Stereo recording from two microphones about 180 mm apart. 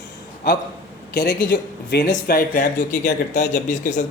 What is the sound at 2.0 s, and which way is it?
Speech, 50° left (ahead or behind).